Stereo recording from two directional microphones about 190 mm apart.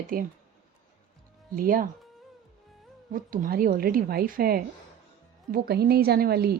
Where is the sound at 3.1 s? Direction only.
45° right (ahead or behind).